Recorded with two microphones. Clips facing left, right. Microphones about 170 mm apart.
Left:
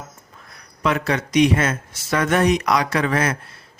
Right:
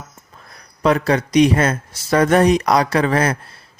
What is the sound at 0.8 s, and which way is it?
Speech, 35° right (ahead or behind).